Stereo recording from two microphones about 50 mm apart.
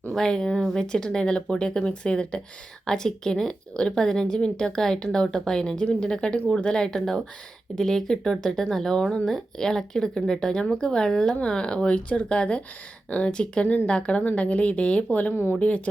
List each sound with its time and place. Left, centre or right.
0.1 s a woman's voice: centre; by 15.9 s left